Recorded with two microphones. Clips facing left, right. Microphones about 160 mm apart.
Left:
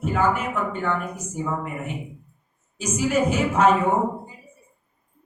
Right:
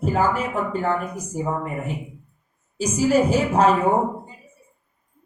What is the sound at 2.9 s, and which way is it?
Speech, 35° right (ahead or behind).